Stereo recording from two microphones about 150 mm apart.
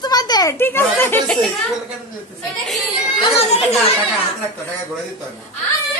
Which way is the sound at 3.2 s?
40° left (ahead or behind).